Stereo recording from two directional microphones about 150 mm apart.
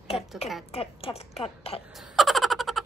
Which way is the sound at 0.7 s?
40° left (ahead or behind).